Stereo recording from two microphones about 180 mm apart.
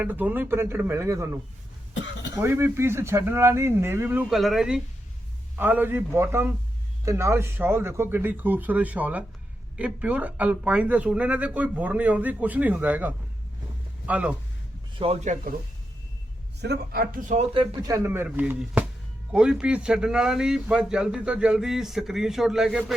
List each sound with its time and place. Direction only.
0.0 s speech: 10° right (ahead or behind)
14.9 s speech: 30° right (ahead or behind)
15.2 s speech: 45° right (ahead or behind)
16.6 s a man's voice: 65° right (ahead or behind)
17.3 s speech: 30° right (ahead or behind)
17.8 s a man's voice: 15° right (ahead or behind)